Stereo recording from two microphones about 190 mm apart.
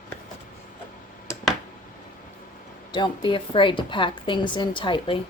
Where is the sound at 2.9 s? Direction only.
25° left (ahead or behind).